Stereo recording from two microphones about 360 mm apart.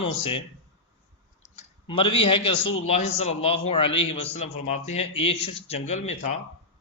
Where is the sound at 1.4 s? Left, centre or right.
Centre.